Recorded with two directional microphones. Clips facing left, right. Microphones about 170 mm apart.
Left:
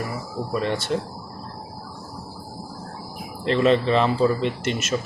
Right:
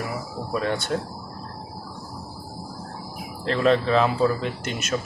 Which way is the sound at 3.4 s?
Centre (ahead or behind).